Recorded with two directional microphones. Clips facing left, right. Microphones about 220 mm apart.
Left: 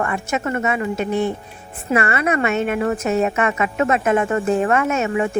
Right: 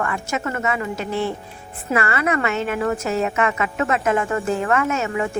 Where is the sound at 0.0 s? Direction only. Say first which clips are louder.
Left 2 dB; 30° left (ahead or behind).